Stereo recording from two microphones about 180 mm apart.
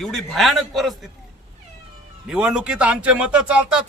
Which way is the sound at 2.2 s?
5° right (ahead or behind).